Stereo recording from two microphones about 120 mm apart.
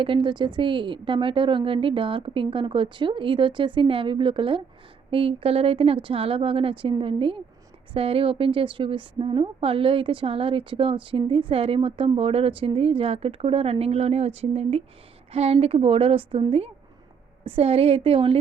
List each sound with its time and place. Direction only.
0.0 s a woman's voice: 45° right (ahead or behind)